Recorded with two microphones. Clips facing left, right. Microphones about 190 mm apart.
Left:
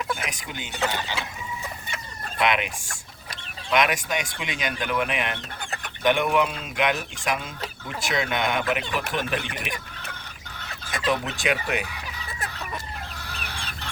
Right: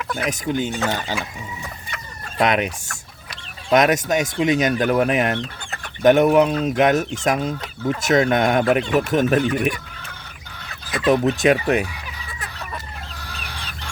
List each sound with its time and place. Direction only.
0.3 s speech: 45° right (ahead or behind)
2.4 s speech: 40° right (ahead or behind)
3.7 s speech: 40° right (ahead or behind)
11.1 s speech: 45° right (ahead or behind)